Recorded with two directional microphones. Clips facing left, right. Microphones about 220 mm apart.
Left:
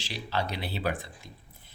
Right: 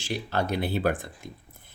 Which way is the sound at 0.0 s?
50° right (ahead or behind).